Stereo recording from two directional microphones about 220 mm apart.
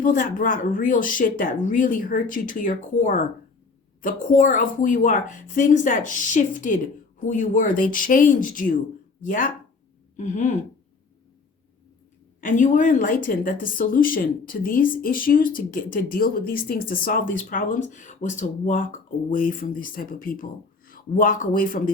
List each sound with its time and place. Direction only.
0.0 s speech: 40° left (ahead or behind)
12.4 s speech: 35° left (ahead or behind)